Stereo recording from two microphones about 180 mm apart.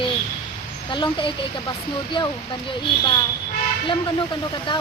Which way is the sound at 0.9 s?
25° left (ahead or behind).